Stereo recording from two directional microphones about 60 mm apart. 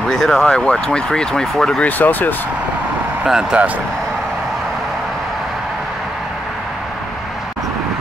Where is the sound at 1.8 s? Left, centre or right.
Left.